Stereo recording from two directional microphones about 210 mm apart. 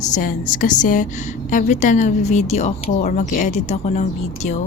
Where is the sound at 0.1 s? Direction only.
40° left (ahead or behind).